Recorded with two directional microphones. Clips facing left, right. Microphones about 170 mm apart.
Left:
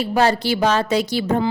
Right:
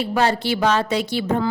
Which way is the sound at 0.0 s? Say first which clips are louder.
Left 2 dB; 40° left (ahead or behind).